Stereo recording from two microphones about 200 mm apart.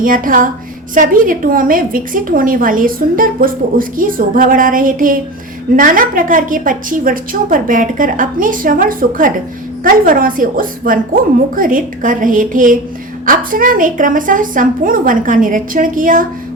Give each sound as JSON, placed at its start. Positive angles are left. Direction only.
{"t": 0.0, "sound": "a woman's voice", "side_deg": -45}